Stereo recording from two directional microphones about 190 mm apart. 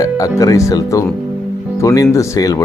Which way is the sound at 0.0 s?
20° left (ahead or behind).